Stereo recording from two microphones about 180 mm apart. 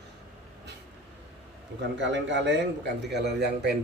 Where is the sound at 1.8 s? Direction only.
80° right.